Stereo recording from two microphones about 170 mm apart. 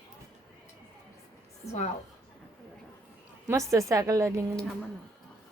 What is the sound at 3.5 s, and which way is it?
Speech, 20° right (ahead or behind).